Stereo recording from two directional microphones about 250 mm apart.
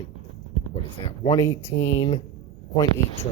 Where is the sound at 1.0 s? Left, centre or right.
Centre.